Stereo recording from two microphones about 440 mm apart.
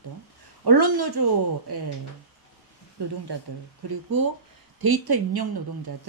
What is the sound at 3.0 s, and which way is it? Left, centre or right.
Speech, right.